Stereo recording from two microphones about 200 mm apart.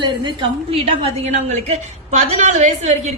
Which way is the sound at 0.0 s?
20° right (ahead or behind).